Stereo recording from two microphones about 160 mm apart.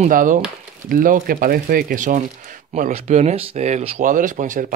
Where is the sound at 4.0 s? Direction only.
55° right (ahead or behind).